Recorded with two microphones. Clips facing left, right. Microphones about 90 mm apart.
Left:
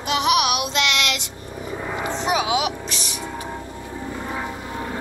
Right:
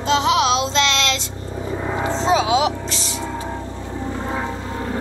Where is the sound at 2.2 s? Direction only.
20° left (ahead or behind).